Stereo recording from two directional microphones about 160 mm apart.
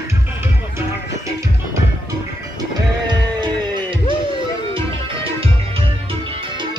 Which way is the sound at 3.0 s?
30° right (ahead or behind).